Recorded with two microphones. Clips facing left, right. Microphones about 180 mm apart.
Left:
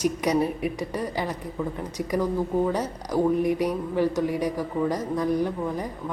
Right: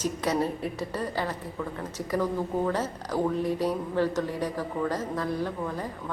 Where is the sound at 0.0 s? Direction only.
15° left (ahead or behind).